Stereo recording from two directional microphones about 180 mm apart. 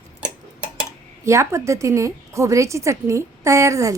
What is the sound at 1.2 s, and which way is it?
A woman's voice, 15° right (ahead or behind).